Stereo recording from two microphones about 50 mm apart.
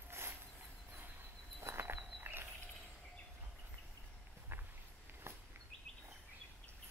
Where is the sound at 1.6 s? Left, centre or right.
Right.